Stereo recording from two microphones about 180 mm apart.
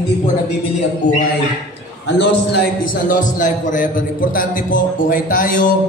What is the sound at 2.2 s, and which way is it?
Speech, 65° left (ahead or behind).